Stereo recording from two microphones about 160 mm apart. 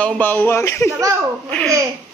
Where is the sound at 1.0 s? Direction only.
20° right (ahead or behind).